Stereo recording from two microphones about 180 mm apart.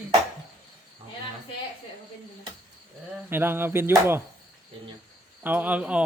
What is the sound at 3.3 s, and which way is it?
Speech, 10° right (ahead or behind).